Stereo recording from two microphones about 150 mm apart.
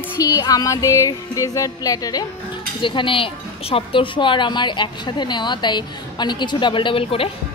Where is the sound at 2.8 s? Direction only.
35° left (ahead or behind).